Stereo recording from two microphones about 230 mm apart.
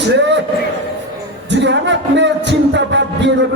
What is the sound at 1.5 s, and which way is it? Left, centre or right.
Music, right.